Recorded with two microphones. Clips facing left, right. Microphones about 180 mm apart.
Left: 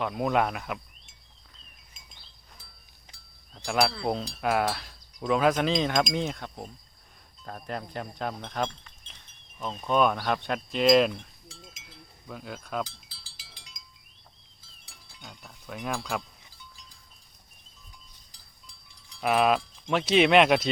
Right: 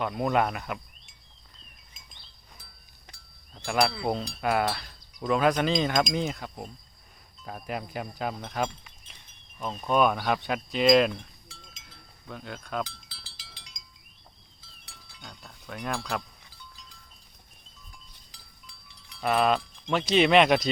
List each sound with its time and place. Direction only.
0.0 s chink: centre (ahead or behind)
3.7 s chink: centre (ahead or behind)
7.4 s wind chime: 5° right (ahead or behind)
9.6 s chink: 5° right (ahead or behind)
11.7 s wind chime: 5° left (ahead or behind)
12.9 s wind chime: 65° right (ahead or behind)
15.2 s speech: 5° left (ahead or behind)
19.2 s chink: 5° left (ahead or behind)